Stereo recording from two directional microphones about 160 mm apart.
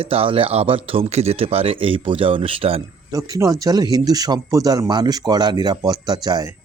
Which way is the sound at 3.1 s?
20° right (ahead or behind).